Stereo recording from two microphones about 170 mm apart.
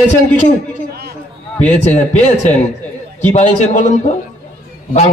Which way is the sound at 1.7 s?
40° left (ahead or behind).